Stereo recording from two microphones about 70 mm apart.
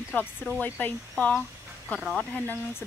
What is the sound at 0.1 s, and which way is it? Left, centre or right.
Speech, left.